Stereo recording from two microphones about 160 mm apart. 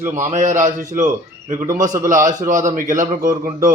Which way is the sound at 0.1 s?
50° right (ahead or behind).